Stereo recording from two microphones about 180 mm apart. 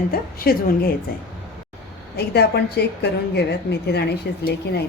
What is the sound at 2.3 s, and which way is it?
A woman's voice, 65° left (ahead or behind).